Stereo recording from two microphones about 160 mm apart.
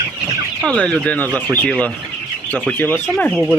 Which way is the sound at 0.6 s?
5° left (ahead or behind).